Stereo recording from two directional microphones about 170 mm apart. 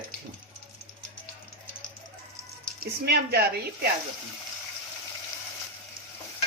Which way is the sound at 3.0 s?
70° right (ahead or behind).